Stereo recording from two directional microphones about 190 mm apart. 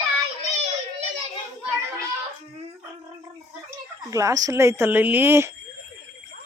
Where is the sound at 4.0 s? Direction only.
15° right (ahead or behind).